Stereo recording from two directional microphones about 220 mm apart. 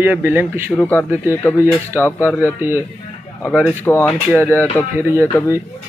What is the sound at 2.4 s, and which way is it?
Speech, 10° right (ahead or behind).